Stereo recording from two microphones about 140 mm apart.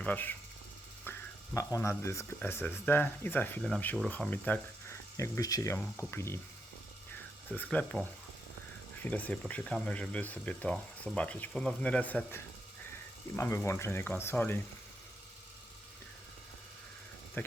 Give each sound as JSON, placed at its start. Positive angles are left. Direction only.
{"t": 0.0, "sound": "speech", "side_deg": 10}
{"t": 1.1, "sound": "a sound", "side_deg": 15}
{"t": 1.5, "sound": "speech", "side_deg": 20}
{"t": 5.1, "sound": "speech", "side_deg": 20}
{"t": 7.4, "sound": "speech", "side_deg": 10}
{"t": 9.0, "sound": "speech", "side_deg": 10}
{"t": 17.4, "sound": "speech", "side_deg": 15}